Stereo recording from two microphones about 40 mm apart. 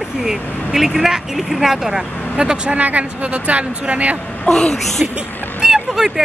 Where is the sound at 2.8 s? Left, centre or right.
Right.